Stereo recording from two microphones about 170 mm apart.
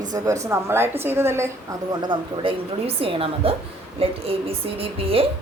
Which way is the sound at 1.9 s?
30° right (ahead or behind).